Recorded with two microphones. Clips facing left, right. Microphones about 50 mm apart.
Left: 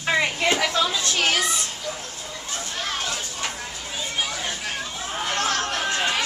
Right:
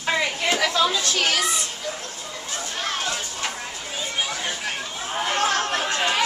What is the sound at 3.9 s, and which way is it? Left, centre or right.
Chatter, centre.